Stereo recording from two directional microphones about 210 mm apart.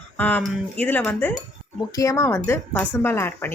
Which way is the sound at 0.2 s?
10° left (ahead or behind).